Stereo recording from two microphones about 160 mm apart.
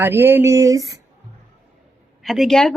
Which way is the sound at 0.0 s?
15° right (ahead or behind).